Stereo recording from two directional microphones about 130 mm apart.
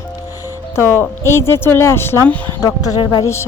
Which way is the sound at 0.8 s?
20° left (ahead or behind).